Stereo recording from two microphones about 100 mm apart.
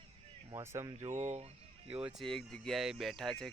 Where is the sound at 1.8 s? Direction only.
15° right (ahead or behind).